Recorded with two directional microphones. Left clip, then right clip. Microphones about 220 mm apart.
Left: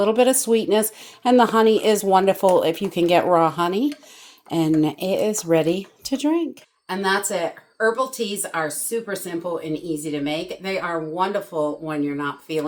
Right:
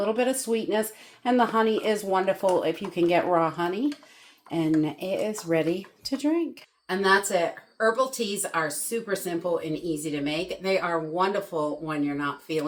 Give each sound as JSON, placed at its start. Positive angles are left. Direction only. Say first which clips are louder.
{"t": 0.0, "sound": "speech", "louder": "left 8 dB", "side_deg": 45}
{"t": 6.8, "sound": "speech", "louder": "even", "side_deg": 15}